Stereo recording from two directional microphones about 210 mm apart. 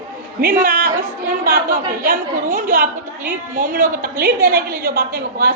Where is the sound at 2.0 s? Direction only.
40° right (ahead or behind).